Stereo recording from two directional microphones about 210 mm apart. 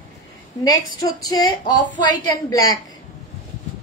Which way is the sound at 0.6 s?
20° left (ahead or behind).